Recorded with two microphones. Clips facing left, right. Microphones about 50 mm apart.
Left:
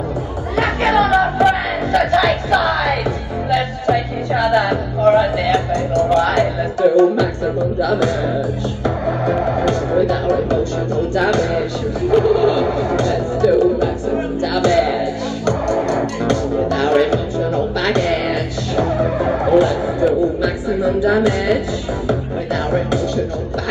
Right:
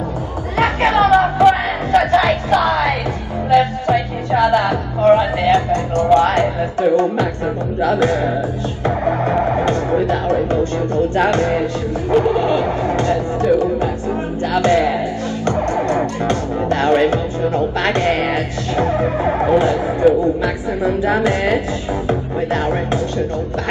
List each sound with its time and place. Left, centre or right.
0.6 s a sound: right
1.9 s music: right
5.2 s speech: right
7.8 s music: right